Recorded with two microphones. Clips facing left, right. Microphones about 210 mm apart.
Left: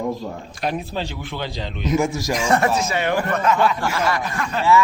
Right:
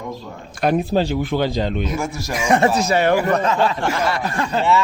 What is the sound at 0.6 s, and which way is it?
A man's voice, 50° right (ahead or behind).